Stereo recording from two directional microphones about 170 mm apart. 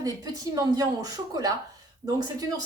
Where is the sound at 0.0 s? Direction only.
20° right (ahead or behind).